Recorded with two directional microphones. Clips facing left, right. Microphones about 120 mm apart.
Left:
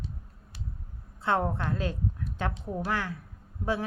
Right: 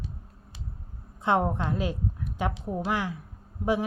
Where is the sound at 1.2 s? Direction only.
15° right (ahead or behind).